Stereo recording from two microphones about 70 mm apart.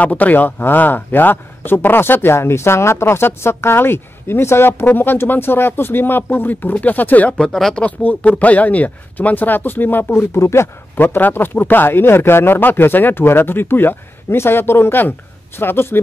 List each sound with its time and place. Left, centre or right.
0.0 s a man's voice: left
7.3 s speech: centre
7.8 s speech: left
11.0 s a man's voice: left